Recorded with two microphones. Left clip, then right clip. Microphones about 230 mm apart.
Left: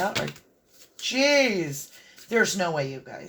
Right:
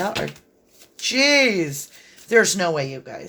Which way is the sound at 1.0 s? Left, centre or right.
Right.